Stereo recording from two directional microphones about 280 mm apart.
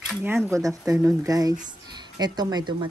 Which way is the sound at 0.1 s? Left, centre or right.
Centre.